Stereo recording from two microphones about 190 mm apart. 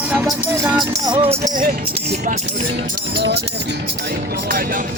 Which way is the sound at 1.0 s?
20° right (ahead or behind).